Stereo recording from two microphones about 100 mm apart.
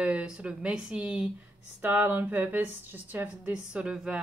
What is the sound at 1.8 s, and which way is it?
A woman's voice, 20° right (ahead or behind).